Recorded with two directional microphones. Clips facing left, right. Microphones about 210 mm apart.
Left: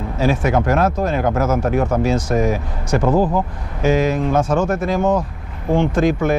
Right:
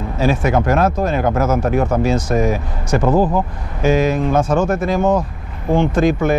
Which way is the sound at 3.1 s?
30° right (ahead or behind).